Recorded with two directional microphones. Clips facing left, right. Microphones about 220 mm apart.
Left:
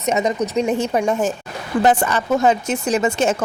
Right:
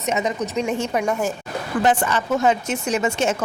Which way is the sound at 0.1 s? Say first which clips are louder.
Left 4 dB; 40° left (ahead or behind).